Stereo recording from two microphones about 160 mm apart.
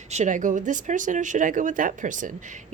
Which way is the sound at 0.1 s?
50° right (ahead or behind).